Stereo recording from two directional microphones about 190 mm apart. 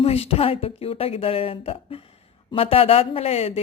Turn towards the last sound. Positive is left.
turn(degrees=30)  # may be behind; listen again after turning